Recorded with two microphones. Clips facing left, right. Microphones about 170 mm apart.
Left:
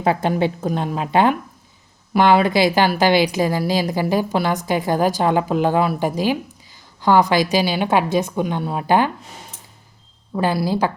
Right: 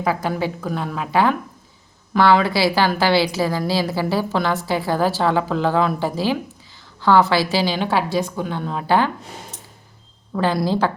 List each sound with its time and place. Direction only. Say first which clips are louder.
0.0 s a woman's voice: left 3 dB; 25° left (ahead or behind)
10.3 s a woman's voice: even; 10° left (ahead or behind)